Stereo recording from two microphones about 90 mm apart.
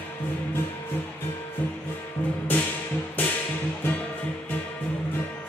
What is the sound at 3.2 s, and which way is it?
Music, 20° left (ahead or behind).